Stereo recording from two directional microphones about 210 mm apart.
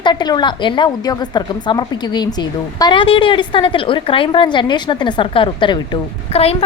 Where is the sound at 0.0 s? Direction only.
20° left (ahead or behind).